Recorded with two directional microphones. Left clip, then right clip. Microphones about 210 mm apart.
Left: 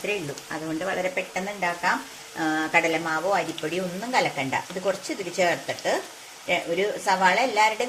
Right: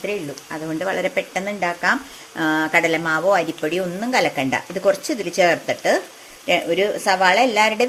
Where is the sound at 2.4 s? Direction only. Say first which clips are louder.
Right 5 dB; 35° right (ahead or behind); by 7.9 s 55° right (ahead or behind).